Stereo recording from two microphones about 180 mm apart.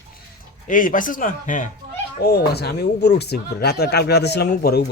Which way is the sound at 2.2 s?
60° left (ahead or behind).